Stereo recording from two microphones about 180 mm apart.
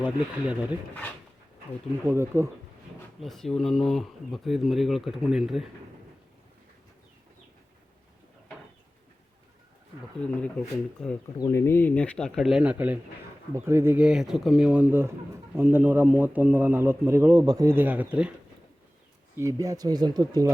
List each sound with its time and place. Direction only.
0.0 s a man's voice: 5° right (ahead or behind)
2.1 s a man's voice: 15° right (ahead or behind)
3.2 s speech: centre (ahead or behind)
10.2 s speech: 5° left (ahead or behind)
11.3 s a man's voice: 15° left (ahead or behind); by 18.3 s 5° right (ahead or behind)
19.4 s speech: 15° right (ahead or behind)